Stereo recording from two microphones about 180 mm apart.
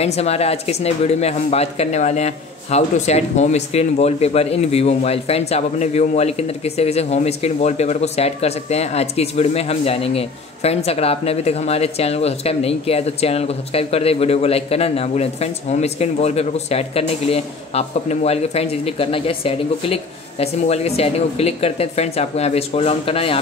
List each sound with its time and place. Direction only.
0.0 s speech: 35° left (ahead or behind)